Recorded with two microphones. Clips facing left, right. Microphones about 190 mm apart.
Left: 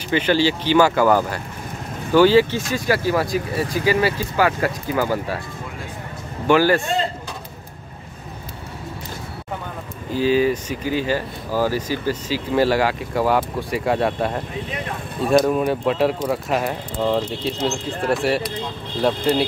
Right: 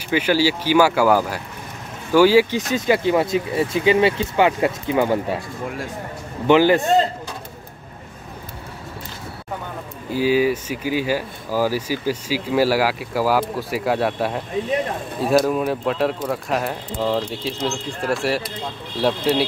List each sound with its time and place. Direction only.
0.1 s speech: 10° right (ahead or behind)
6.4 s speech: 20° right (ahead or behind)
10.1 s speech: 10° right (ahead or behind)